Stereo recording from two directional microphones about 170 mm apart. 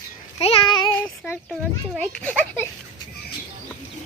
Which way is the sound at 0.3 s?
35° left (ahead or behind).